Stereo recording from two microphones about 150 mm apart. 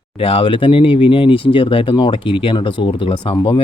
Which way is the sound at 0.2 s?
40° left (ahead or behind).